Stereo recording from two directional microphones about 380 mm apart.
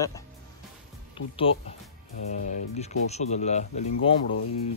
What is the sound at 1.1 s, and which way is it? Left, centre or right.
Speech, centre.